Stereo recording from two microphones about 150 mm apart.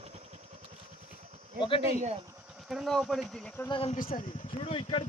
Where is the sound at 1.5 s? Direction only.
35° left (ahead or behind).